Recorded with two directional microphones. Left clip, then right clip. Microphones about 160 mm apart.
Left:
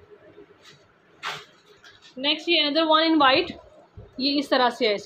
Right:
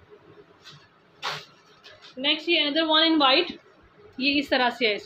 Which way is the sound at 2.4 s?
25° left (ahead or behind).